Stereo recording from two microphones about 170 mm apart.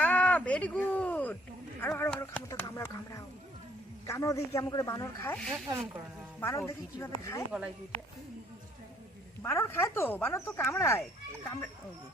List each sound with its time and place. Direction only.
0.0 s a sound: 10° left (ahead or behind)
1.8 s speech: 10° left (ahead or behind)
5.6 s speech: 15° right (ahead or behind)
6.4 s speech: 15° left (ahead or behind)
9.4 s speech: 15° left (ahead or behind)